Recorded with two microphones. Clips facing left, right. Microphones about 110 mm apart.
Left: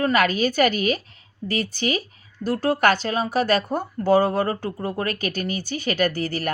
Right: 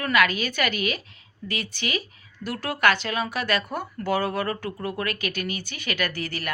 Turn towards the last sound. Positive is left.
turn(degrees=40)  # may be behind; listen again after turning